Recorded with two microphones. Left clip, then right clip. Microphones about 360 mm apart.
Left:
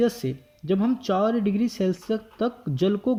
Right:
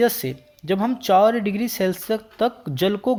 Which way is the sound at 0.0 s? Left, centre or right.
Right.